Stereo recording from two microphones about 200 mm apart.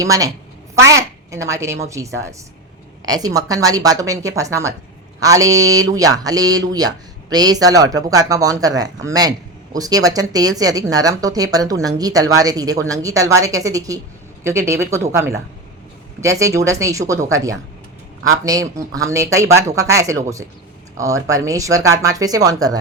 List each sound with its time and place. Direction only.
0.0 s a woman's voice: 15° right (ahead or behind)
3.1 s speech: 20° right (ahead or behind)
21.2 s speech: 15° right (ahead or behind)